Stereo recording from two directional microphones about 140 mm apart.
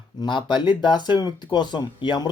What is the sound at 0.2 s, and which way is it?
A man's voice, 35° left (ahead or behind).